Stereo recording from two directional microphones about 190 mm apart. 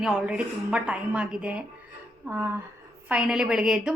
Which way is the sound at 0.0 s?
5° right (ahead or behind).